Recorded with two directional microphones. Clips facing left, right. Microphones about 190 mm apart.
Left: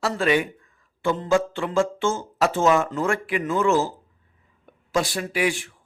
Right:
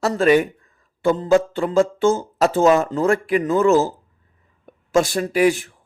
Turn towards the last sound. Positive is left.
turn(degrees=-40)  # may be behind; listen again after turning